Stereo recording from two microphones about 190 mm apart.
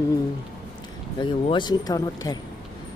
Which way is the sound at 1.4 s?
25° left (ahead or behind).